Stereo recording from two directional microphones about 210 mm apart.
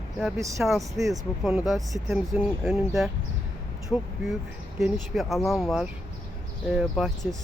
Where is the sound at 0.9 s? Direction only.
15° right (ahead or behind).